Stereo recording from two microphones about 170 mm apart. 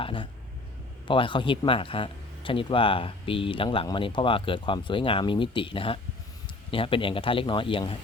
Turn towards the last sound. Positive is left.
turn(degrees=30)  # may be behind; listen again after turning